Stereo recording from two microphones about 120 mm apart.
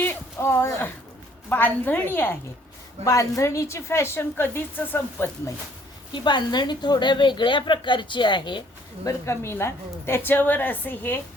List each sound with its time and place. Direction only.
0.0 s a sound: 20° left (ahead or behind)
1.5 s a woman's voice: 15° left (ahead or behind)
6.1 s a woman's voice: 40° left (ahead or behind)
9.0 s a woman's voice: 25° left (ahead or behind)